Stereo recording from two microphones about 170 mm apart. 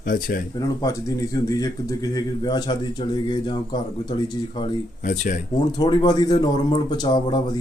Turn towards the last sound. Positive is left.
turn(degrees=25)  # may be behind; listen again after turning